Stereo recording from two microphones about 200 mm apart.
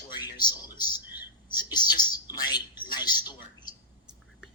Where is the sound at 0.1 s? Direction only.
20° left (ahead or behind).